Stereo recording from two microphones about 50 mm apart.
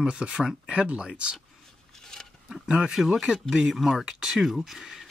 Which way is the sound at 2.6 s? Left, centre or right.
Centre.